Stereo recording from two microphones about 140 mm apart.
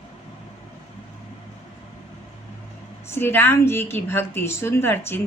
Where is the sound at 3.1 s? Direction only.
15° left (ahead or behind).